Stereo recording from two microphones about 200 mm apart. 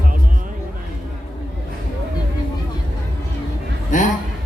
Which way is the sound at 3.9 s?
40° left (ahead or behind).